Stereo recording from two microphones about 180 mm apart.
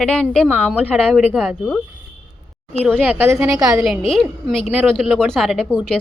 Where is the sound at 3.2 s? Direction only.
15° right (ahead or behind).